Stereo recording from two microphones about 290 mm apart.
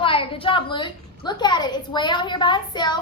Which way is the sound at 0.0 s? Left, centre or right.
Centre.